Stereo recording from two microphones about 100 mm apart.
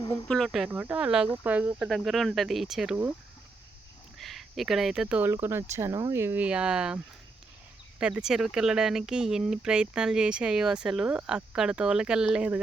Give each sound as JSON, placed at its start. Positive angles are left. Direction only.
{"t": 0.3, "sound": "speech", "side_deg": 5}
{"t": 0.7, "sound": "speech", "side_deg": -15}
{"t": 1.9, "sound": "speech", "side_deg": 0}
{"t": 4.2, "sound": "speech", "side_deg": 0}
{"t": 5.3, "sound": "speech", "side_deg": -25}
{"t": 6.4, "sound": "speech", "side_deg": -10}